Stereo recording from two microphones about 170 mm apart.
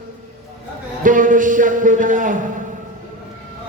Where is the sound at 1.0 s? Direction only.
50° right (ahead or behind).